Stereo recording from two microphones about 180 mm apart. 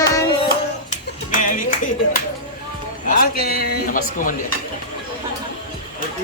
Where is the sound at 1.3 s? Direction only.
45° left (ahead or behind).